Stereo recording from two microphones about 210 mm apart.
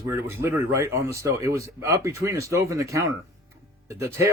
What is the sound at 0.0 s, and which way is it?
Speech, 10° right (ahead or behind).